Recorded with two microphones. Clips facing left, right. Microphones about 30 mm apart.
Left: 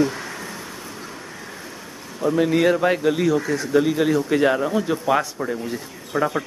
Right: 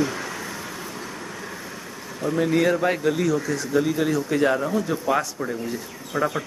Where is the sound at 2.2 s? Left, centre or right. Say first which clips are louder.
Left 3 dB; centre.